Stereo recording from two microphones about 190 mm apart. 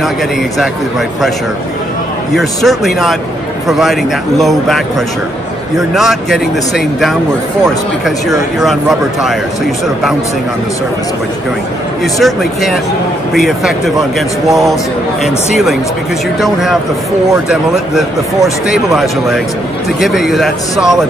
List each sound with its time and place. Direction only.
2.3 s speech: centre (ahead or behind)
5.8 s speech: centre (ahead or behind)
8.5 s speech: centre (ahead or behind)
12.2 s speech: centre (ahead or behind)
16.3 s speech: centre (ahead or behind)